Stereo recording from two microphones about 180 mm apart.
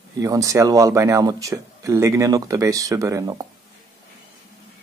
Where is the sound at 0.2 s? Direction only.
20° right (ahead or behind).